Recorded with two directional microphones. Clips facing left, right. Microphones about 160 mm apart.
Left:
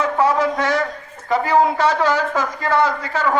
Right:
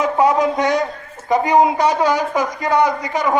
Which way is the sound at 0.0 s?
15° right (ahead or behind).